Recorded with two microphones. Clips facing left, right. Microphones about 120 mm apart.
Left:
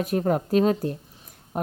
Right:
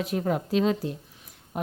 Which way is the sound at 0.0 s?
45° left (ahead or behind).